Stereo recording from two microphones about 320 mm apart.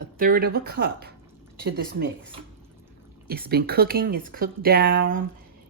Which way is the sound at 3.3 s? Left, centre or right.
Right.